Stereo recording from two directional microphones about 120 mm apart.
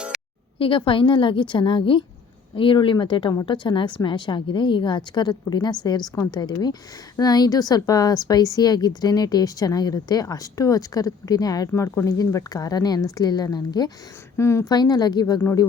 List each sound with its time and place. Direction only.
0.1 s a sound: 5° right (ahead or behind)
0.9 s a woman's voice: 45° left (ahead or behind)
14.3 s a woman's voice: 20° left (ahead or behind)
14.7 s a woman's voice: 35° left (ahead or behind)